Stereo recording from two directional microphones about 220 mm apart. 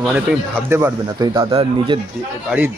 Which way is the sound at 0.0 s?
5° right (ahead or behind).